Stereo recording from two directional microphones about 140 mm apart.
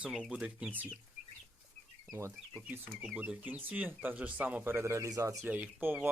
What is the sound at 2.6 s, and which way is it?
Speech, 10° right (ahead or behind).